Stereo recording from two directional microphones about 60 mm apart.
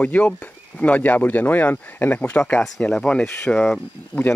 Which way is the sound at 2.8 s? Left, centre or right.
Centre.